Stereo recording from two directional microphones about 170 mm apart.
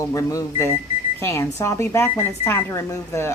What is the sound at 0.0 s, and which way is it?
Speech, 20° left (ahead or behind).